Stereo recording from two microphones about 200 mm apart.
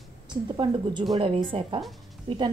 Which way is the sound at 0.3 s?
20° right (ahead or behind).